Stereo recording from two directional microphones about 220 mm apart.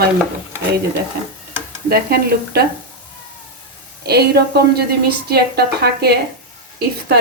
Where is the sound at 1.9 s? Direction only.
45° right (ahead or behind).